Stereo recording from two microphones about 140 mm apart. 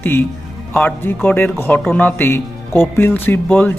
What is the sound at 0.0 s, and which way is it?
Speech, 15° left (ahead or behind).